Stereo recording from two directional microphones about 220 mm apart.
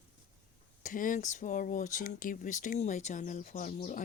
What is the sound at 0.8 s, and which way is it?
Speech, 35° left (ahead or behind).